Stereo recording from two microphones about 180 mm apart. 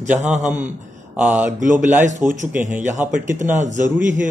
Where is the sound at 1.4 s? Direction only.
45° right (ahead or behind).